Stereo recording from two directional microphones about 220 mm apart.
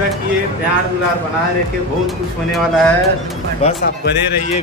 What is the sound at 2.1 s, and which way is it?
Speech, centre (ahead or behind).